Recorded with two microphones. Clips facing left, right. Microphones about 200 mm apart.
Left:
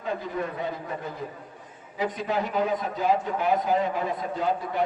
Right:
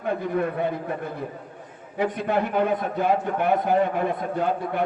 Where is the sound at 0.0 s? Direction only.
60° right (ahead or behind).